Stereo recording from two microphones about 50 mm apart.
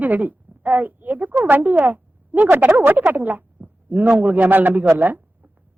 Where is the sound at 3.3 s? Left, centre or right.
Right.